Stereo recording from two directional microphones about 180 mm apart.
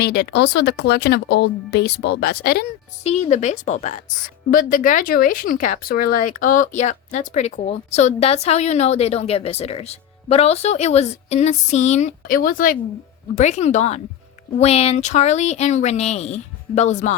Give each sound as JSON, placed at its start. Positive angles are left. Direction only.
{"t": 0.0, "sound": "speech", "side_deg": 65}
{"t": 3.0, "sound": "speech", "side_deg": 40}
{"t": 13.3, "sound": "speech", "side_deg": 40}